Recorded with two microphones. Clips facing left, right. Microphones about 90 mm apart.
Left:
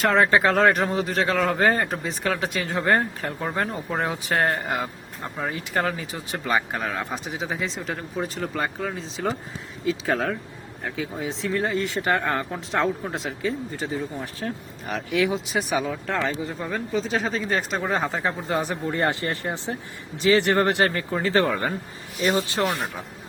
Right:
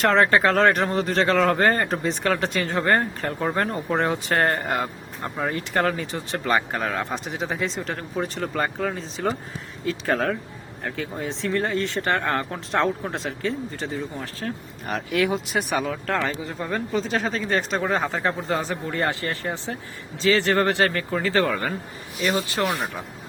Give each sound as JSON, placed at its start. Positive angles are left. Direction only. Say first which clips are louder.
{"t": 0.0, "sound": "speech", "louder": "right 1 dB", "side_deg": 5}
{"t": 18.5, "sound": "a man's voice", "louder": "left 1 dB", "side_deg": 15}